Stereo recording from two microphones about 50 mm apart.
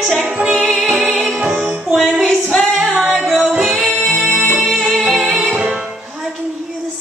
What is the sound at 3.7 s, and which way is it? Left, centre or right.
Music, centre.